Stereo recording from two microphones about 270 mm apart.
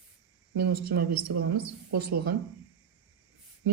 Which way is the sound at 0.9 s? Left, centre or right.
Right.